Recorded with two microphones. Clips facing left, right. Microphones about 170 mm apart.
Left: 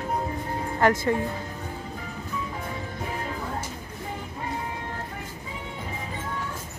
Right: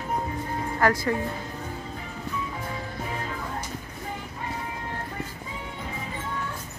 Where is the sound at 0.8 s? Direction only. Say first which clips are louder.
Left 2 dB; 20° left (ahead or behind).